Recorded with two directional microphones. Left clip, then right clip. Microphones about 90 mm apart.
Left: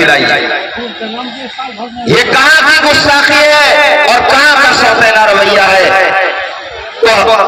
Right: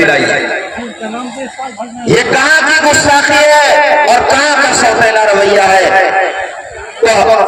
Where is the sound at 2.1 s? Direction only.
25° right (ahead or behind).